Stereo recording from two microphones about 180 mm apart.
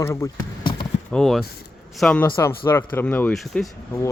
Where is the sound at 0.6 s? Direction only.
25° left (ahead or behind).